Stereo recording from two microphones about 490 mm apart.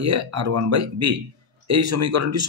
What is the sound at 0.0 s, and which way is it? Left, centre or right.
Speech, right.